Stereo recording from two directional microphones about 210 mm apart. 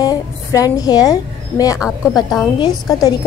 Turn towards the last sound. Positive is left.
turn(degrees=15)  # may be behind; listen again after turning